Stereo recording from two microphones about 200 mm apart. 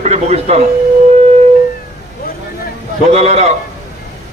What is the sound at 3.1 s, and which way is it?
Speech, 35° right (ahead or behind).